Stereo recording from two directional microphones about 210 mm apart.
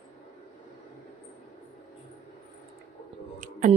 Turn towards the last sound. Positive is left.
turn(degrees=-40)  # may be behind; listen again after turning